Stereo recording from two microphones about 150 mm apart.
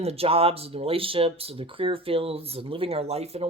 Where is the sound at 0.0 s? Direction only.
40° right (ahead or behind).